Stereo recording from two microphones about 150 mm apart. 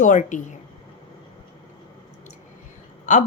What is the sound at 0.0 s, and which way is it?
Speech, 55° left (ahead or behind).